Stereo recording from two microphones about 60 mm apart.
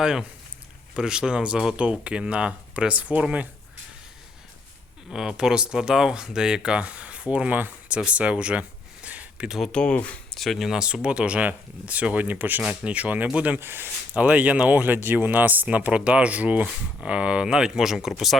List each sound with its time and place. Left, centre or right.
0.0 s speech: centre
5.1 s speech: centre
7.6 s a sound: right
9.7 s speech: centre
10.3 s speech: centre
10.7 s speech: centre
13.6 s speech: right
14.2 s speech: right; by 18.3 s centre